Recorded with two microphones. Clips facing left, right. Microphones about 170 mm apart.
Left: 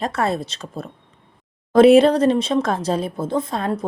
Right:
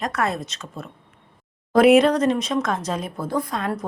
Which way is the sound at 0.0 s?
30° left (ahead or behind).